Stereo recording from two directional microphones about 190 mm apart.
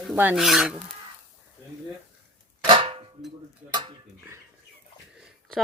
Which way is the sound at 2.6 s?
25° right (ahead or behind).